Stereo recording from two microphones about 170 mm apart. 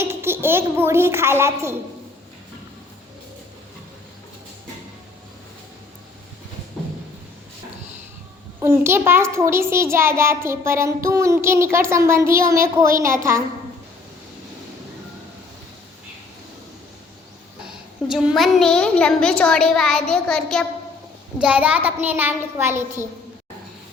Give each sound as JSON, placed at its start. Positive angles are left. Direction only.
{"t": 0.0, "sound": "a child's voice", "side_deg": -15}
{"t": 8.6, "sound": "a child's voice", "side_deg": -15}
{"t": 18.1, "sound": "a child's voice", "side_deg": 0}
{"t": 21.3, "sound": "a child's voice", "side_deg": -10}